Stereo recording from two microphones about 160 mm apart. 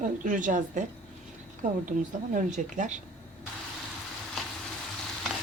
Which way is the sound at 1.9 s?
55° right (ahead or behind).